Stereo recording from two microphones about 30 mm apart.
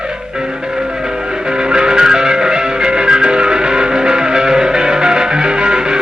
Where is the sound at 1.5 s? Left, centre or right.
Right.